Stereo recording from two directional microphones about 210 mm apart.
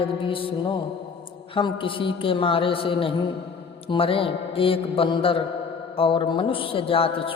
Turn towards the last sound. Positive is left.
turn(degrees=25)  # may be behind; listen again after turning